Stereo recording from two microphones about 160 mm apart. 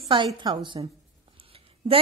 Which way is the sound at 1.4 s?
35° right (ahead or behind).